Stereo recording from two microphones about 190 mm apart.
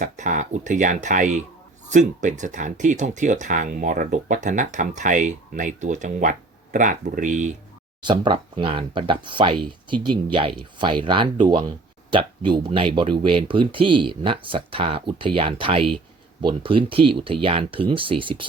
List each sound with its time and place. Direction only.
0.0 s speech: 40° right (ahead or behind)
8.0 s speech: 25° right (ahead or behind)